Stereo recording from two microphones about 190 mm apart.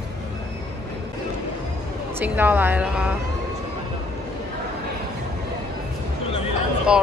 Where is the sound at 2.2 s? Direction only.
10° right (ahead or behind).